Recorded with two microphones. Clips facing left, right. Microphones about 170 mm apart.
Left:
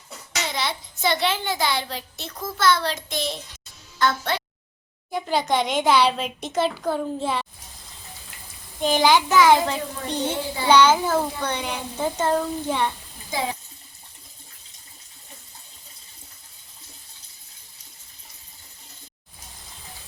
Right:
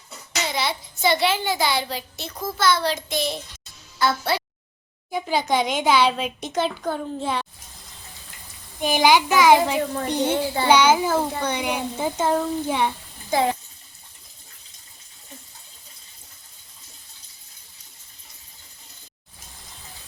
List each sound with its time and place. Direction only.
0.5 s a child's voice: 5° right (ahead or behind)
8.8 s a child's voice: 15° right (ahead or behind)
13.3 s speech: 55° right (ahead or behind)